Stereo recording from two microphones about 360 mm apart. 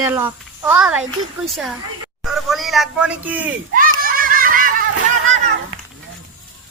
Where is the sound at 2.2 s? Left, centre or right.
Centre.